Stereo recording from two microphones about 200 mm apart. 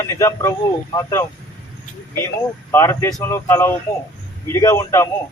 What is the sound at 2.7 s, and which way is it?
Speech, 10° left (ahead or behind).